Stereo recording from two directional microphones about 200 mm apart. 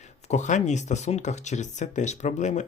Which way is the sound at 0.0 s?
35° left (ahead or behind).